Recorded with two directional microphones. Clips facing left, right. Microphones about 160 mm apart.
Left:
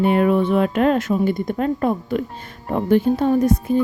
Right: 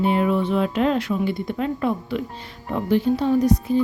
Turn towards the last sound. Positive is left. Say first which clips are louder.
# left 1 dB
turn(degrees=50)  # may be behind; listen again after turning